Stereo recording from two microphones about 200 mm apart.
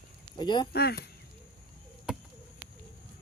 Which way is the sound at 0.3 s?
20° left (ahead or behind).